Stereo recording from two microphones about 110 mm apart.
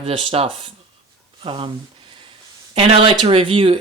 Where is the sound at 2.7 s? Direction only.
55° right (ahead or behind).